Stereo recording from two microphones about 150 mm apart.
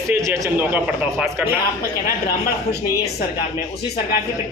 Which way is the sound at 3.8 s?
90° left.